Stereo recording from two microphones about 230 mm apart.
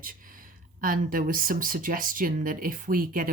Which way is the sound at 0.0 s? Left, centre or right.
Right.